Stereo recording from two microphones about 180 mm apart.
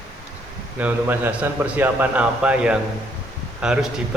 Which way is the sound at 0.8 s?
10° right (ahead or behind).